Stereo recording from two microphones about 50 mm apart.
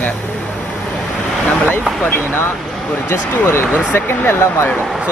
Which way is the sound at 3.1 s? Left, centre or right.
Left.